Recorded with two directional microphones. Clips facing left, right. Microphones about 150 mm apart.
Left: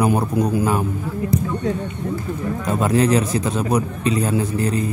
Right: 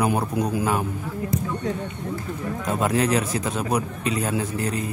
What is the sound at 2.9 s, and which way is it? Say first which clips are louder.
Speech: left 6 dB; 30° left (ahead or behind).